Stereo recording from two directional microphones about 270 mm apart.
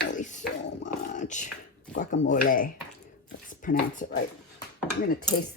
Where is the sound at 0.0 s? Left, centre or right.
Left.